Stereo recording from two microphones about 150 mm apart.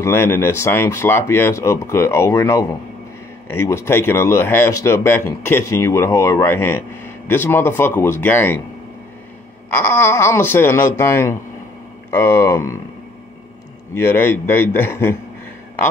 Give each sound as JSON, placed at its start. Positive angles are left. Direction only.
{"t": 0.0, "sound": "speech", "side_deg": 15}
{"t": 9.7, "sound": "speech", "side_deg": 15}
{"t": 13.9, "sound": "speech", "side_deg": 15}